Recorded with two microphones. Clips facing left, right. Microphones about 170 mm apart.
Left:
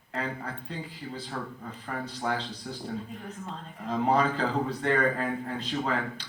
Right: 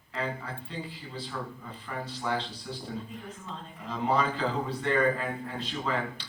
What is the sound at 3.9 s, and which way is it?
Speech, 40° left (ahead or behind).